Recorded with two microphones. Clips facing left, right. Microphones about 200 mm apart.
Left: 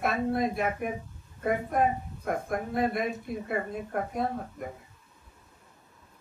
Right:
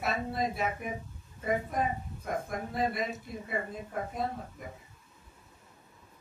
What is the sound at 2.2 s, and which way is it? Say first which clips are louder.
Speech: left 4 dB; 60° left (ahead or behind).